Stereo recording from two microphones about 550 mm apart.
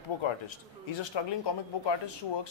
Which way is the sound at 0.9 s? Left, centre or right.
Left.